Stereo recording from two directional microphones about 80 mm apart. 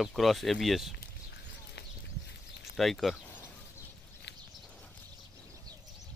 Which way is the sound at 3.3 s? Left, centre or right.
Left.